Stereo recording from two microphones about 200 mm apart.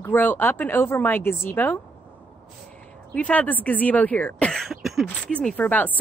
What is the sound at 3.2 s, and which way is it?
Speech, 5° left (ahead or behind).